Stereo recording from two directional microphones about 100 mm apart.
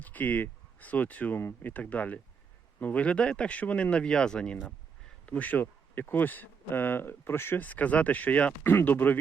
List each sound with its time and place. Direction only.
0.0 s speech: 15° left (ahead or behind)